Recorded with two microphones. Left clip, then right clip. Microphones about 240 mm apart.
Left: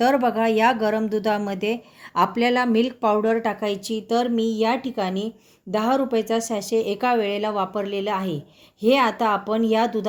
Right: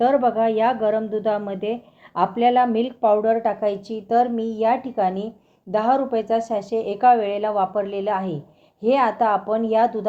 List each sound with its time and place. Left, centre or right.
0.0 s a woman's voice: left